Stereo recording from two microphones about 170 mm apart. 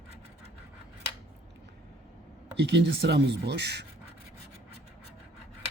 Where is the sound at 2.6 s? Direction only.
90° right.